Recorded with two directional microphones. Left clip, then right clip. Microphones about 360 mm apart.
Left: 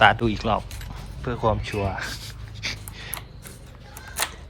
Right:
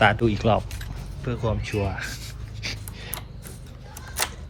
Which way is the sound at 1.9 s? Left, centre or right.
Centre.